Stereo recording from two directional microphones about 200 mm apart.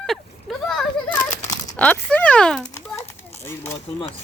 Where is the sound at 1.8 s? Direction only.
5° left (ahead or behind).